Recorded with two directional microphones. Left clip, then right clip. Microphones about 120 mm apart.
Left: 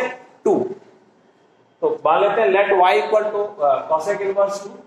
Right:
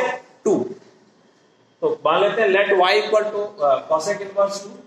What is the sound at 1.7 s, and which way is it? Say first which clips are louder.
A man's voice: left 1 dB; 25° left (ahead or behind).